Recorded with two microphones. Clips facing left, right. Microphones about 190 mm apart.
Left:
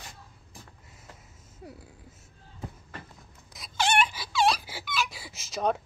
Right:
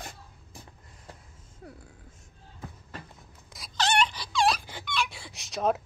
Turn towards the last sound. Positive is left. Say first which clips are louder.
# right 1 dB
turn(degrees=0)  # may be behind; listen again after turning